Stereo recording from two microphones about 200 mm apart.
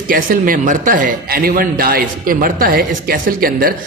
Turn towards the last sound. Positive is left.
turn(degrees=-45)  # may be behind; listen again after turning